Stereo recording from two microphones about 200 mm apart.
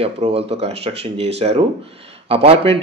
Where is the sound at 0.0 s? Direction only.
30° right (ahead or behind).